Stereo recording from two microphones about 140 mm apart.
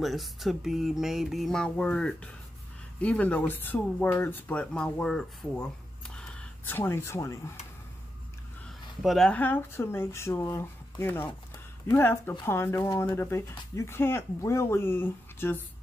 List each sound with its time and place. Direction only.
0.0 s speech: centre (ahead or behind); by 7.5 s 20° left (ahead or behind)
9.0 s speech: centre (ahead or behind)
9.4 s speech: 15° left (ahead or behind)